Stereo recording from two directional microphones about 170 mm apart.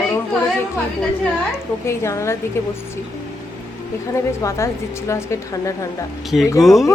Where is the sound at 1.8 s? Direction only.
15° left (ahead or behind).